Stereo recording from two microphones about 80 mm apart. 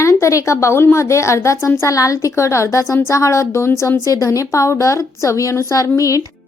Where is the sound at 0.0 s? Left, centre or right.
Left.